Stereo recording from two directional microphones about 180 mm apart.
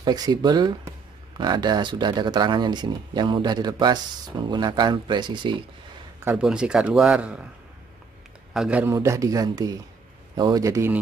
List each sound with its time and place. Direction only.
0.0 s speech: 20° right (ahead or behind)
6.2 s speech: 5° right (ahead or behind)
8.5 s speech: 5° right (ahead or behind)